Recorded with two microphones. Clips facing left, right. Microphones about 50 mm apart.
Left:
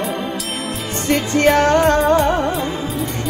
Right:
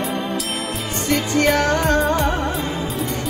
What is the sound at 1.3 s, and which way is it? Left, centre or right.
Music, left.